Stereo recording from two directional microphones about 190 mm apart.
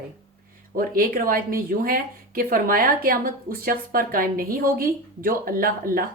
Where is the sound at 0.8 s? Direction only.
50° right (ahead or behind).